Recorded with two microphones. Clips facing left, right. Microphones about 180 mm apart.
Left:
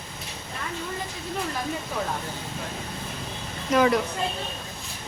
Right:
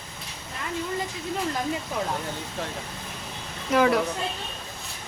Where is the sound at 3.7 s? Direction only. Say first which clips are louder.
Even; 5° right (ahead or behind).